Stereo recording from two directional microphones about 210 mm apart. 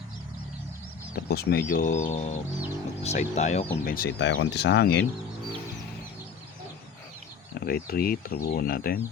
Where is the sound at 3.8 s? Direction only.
45° left (ahead or behind).